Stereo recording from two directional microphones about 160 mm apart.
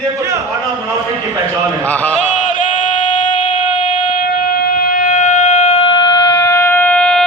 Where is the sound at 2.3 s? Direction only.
50° left (ahead or behind).